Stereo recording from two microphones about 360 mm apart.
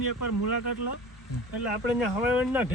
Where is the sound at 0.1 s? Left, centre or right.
Left.